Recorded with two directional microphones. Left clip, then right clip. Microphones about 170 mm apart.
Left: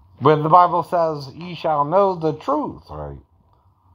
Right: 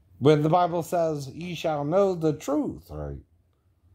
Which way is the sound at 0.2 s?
10° right (ahead or behind).